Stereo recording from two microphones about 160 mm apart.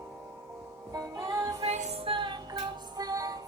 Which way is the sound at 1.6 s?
45° right (ahead or behind).